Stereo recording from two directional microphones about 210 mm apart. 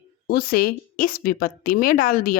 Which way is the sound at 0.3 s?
45° left (ahead or behind).